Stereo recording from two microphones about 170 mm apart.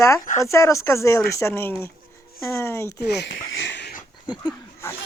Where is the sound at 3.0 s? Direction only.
80° left.